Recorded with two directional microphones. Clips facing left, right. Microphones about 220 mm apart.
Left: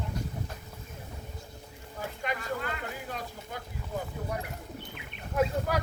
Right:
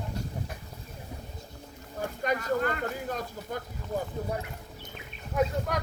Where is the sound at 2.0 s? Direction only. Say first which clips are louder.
Right 5 dB; 45° right (ahead or behind).